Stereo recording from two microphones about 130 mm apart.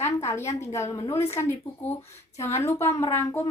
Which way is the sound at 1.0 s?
50° left (ahead or behind).